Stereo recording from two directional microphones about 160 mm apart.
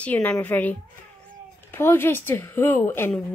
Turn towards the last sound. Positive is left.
turn(degrees=15)  # may be behind; listen again after turning